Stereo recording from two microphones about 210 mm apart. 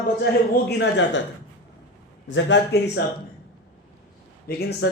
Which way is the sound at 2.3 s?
60° left (ahead or behind).